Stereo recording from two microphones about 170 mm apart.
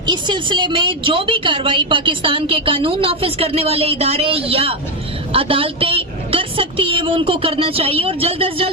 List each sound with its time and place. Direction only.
0.0 s a woman's voice: 25° right (ahead or behind)